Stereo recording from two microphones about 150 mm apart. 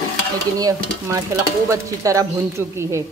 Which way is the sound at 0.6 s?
25° right (ahead or behind).